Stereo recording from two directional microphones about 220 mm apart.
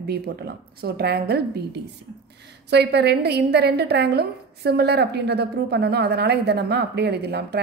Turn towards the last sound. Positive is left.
turn(degrees=-50)  # may be behind; listen again after turning